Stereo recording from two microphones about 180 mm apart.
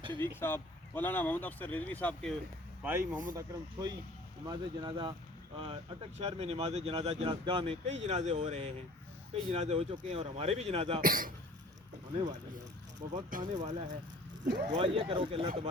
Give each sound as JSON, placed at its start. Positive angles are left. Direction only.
{"t": 0.2, "sound": "speech", "side_deg": 15}
{"t": 2.8, "sound": "speech", "side_deg": -10}
{"t": 3.3, "sound": "speech", "side_deg": -20}
{"t": 11.0, "sound": "speech", "side_deg": -50}
{"t": 13.3, "sound": "speech", "side_deg": -45}
{"t": 14.8, "sound": "speech", "side_deg": -30}